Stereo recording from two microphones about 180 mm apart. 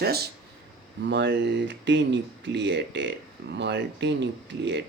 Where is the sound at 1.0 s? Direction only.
70° right (ahead or behind).